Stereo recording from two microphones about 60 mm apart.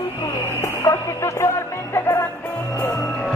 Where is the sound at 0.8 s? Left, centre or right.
Left.